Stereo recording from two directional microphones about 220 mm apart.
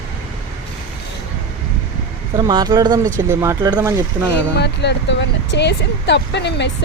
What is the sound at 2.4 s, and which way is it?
Speech, 20° right (ahead or behind).